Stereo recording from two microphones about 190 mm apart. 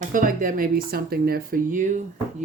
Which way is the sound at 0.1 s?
45° right (ahead or behind).